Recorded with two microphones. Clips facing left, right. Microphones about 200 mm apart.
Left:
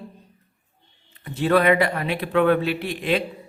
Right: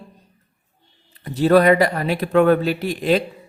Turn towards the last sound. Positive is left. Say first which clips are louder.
# right 4 dB
turn(degrees=-40)  # may be behind; listen again after turning